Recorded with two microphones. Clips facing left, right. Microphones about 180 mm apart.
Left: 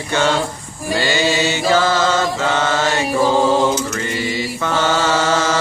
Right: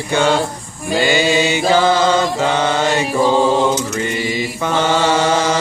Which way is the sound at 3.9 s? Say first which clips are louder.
Right 2 dB; 20° right (ahead or behind).